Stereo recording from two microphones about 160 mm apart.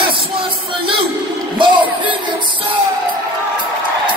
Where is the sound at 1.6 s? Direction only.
30° right (ahead or behind).